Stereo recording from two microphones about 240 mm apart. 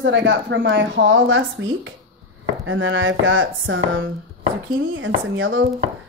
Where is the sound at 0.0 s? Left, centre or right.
Right.